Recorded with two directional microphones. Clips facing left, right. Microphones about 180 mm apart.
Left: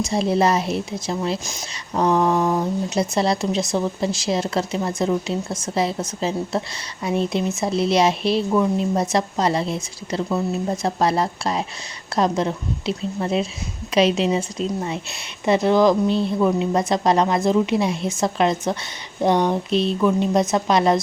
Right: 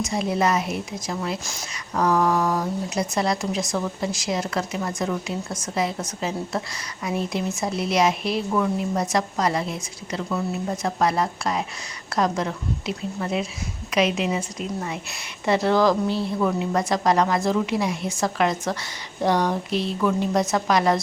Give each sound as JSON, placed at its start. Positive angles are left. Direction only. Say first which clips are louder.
{"t": 0.0, "sound": "a woman's voice", "louder": "left 4 dB", "side_deg": 30}